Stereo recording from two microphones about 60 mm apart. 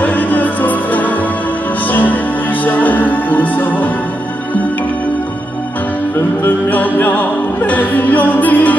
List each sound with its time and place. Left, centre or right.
0.0 s music: left
6.4 s music: left